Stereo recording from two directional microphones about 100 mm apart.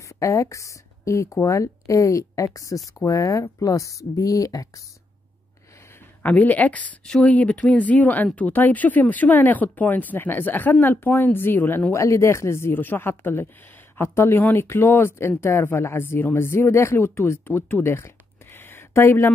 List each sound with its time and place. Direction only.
0.1 s speech: 30° left (ahead or behind)
6.2 s speech: 15° left (ahead or behind)